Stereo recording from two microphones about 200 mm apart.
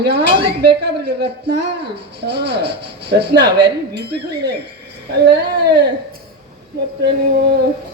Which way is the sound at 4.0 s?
55° right (ahead or behind).